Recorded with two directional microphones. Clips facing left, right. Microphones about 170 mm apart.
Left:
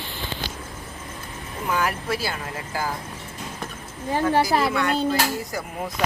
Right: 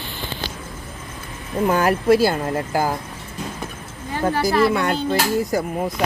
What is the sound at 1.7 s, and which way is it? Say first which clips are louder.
Speech: right 9 dB; 40° right (ahead or behind).